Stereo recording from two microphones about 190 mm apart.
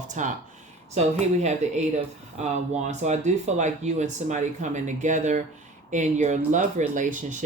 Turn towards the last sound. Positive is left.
turn(degrees=-40)  # may be behind; listen again after turning